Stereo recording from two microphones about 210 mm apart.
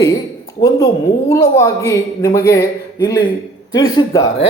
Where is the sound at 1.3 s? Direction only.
15° left (ahead or behind).